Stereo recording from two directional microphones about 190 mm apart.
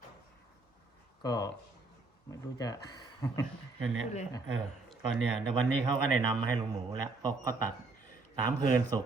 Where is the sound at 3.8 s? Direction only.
90° right.